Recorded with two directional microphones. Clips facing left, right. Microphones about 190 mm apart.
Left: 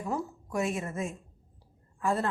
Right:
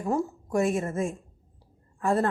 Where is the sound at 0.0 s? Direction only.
45° right (ahead or behind).